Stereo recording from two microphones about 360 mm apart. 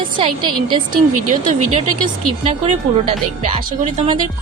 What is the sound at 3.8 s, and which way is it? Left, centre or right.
Speech, centre.